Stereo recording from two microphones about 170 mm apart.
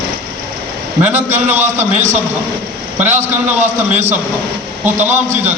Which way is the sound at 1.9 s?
45° right (ahead or behind).